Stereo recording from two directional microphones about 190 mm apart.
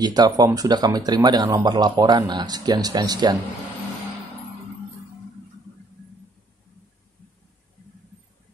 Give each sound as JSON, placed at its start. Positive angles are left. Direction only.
{"t": 0.0, "sound": "speech", "side_deg": -20}